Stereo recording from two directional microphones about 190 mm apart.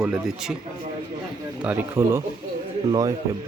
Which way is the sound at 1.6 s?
10° right (ahead or behind).